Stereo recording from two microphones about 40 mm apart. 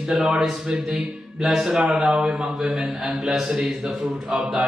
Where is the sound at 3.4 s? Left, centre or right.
Right.